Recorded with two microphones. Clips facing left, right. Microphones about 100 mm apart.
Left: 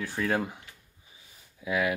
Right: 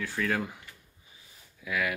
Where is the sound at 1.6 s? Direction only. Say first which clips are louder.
Left 3 dB; 25° left (ahead or behind).